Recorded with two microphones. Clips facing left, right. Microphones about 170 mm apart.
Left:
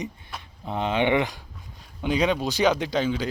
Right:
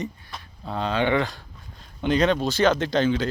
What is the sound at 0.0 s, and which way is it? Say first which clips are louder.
Speech: right 1 dB; 10° left (ahead or behind).